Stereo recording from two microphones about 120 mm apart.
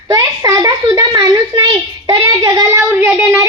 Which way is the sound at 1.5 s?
45° right (ahead or behind).